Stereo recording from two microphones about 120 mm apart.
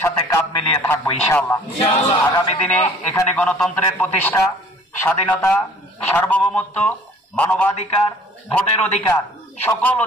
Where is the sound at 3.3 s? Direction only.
10° left (ahead or behind).